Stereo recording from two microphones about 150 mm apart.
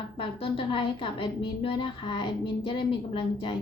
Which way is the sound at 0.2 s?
35° left (ahead or behind).